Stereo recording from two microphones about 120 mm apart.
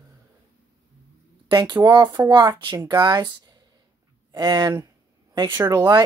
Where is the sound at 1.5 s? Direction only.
35° right (ahead or behind).